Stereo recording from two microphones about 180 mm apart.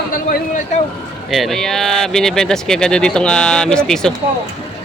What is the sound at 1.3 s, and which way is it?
Speech, centre (ahead or behind).